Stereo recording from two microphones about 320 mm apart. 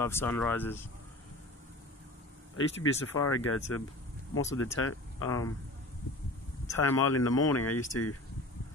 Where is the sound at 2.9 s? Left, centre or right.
Centre.